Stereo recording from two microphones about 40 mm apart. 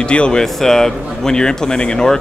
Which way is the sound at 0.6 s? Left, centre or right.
Centre.